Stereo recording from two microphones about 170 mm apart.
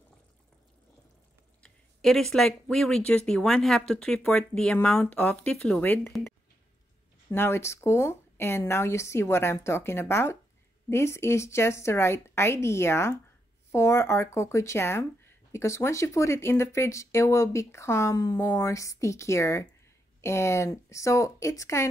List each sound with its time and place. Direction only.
1.6 s speech: centre (ahead or behind)
7.2 s speech: 15° left (ahead or behind)